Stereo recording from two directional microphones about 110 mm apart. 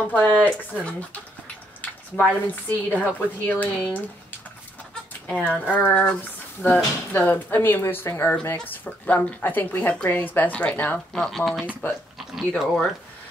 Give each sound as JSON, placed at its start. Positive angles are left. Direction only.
{"t": 0.0, "sound": "speech", "side_deg": 15}
{"t": 2.1, "sound": "speech", "side_deg": 15}
{"t": 5.2, "sound": "speech", "side_deg": 10}
{"t": 11.8, "sound": "speech", "side_deg": 20}
{"t": 12.2, "sound": "speech", "side_deg": 0}